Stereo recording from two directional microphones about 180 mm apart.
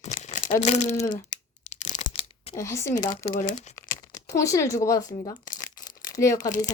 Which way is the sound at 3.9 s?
20° left (ahead or behind).